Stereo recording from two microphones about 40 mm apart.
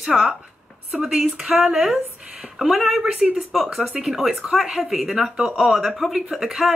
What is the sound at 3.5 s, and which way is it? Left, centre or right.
A woman's voice, centre.